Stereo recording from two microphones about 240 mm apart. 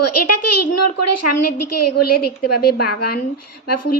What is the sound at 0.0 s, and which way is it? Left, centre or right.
A woman's voice, left.